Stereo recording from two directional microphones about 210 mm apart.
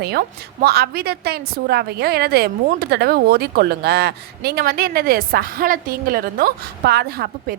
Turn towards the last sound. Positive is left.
turn(degrees=-50)  # may be behind; listen again after turning